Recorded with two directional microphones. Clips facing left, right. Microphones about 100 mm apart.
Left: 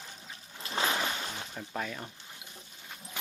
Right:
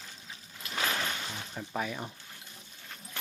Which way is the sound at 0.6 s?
25° left (ahead or behind).